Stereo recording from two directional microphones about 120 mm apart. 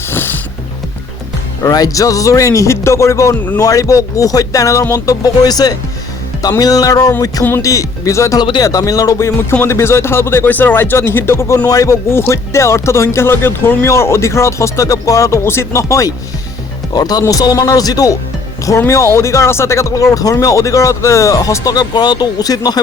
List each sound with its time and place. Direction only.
0.1 s pulleys: 15° left (ahead or behind)
1.6 s speech: 30° left (ahead or behind)
8.4 s speech: 35° left (ahead or behind)